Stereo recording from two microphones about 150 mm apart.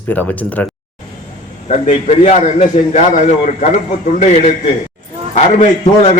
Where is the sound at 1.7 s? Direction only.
45° left (ahead or behind).